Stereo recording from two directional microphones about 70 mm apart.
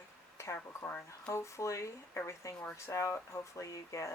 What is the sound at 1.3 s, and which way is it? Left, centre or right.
Speech, left.